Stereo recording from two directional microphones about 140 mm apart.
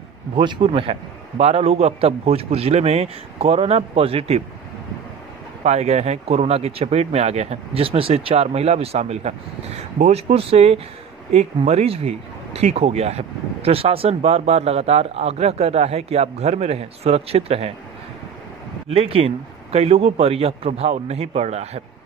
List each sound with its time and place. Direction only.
0.4 s speech: 35° right (ahead or behind)
5.6 s speech: 50° right (ahead or behind)
10.3 s speech: 45° right (ahead or behind)
18.9 s speech: 45° right (ahead or behind)